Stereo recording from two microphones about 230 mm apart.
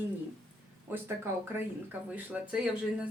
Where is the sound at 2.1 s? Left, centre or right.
Centre.